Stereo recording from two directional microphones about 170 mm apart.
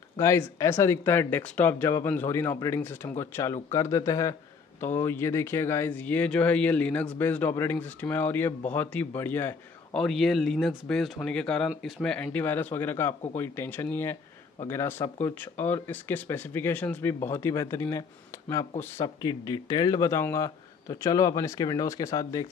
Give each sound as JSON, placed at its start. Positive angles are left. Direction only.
{"t": 0.2, "sound": "speech", "side_deg": 15}
{"t": 9.9, "sound": "speech", "side_deg": 0}
{"t": 19.0, "sound": "speech", "side_deg": 25}